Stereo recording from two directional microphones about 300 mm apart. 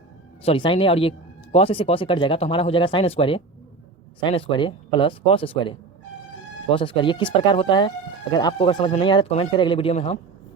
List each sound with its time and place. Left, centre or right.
0.4 s speech: centre